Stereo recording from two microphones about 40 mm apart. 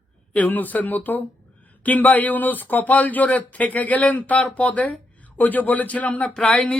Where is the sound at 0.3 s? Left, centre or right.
Left.